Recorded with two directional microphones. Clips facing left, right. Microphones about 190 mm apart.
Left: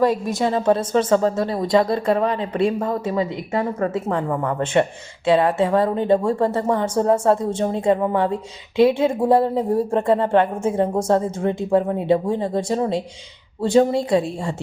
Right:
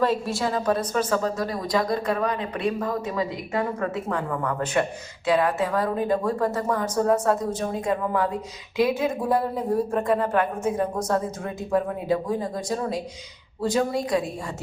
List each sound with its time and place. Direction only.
0.0 s a woman's voice: 15° left (ahead or behind)